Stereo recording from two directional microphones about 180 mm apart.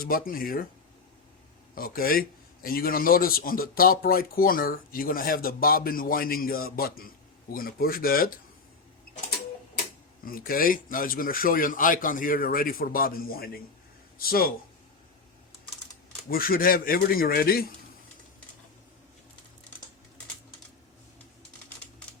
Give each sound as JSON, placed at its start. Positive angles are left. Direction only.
{"t": 0.0, "sound": "speech", "side_deg": 55}
{"t": 1.7, "sound": "speech", "side_deg": 55}
{"t": 10.2, "sound": "speech", "side_deg": 55}
{"t": 16.3, "sound": "speech", "side_deg": 55}